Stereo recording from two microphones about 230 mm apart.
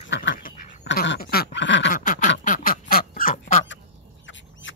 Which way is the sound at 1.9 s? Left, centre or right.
Left.